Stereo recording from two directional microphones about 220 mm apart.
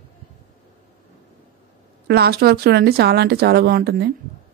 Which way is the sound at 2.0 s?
45° right (ahead or behind).